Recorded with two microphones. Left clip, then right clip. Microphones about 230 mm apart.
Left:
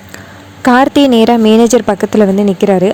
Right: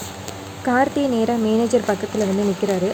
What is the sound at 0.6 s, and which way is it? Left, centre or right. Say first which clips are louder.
Speech: left 11 dB; left.